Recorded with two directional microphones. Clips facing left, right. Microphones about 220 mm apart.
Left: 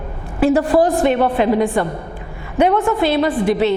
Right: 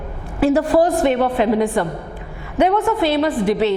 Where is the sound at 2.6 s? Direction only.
20° left (ahead or behind).